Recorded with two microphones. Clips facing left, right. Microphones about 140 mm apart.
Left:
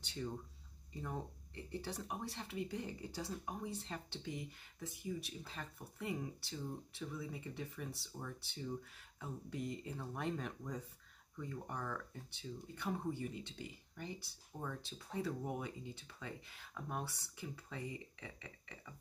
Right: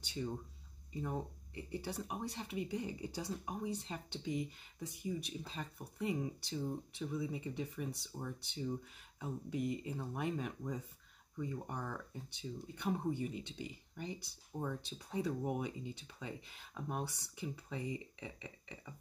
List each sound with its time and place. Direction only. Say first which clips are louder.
0.0 s speech: right 3 dB; 10° right (ahead or behind)